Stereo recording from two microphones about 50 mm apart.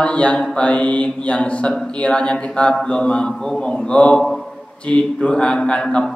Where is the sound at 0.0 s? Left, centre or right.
Left.